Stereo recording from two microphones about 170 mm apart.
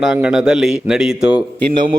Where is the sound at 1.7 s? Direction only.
30° right (ahead or behind).